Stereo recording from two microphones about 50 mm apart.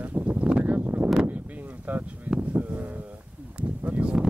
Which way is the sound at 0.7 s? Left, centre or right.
Right.